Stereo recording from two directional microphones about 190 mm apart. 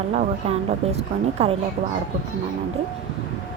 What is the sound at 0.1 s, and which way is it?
Speech, 35° right (ahead or behind).